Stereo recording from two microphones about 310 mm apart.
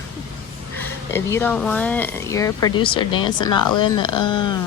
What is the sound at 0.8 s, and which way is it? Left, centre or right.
Speech, centre.